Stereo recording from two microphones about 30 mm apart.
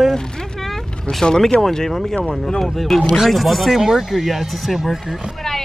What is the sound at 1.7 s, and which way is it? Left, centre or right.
Speech, centre.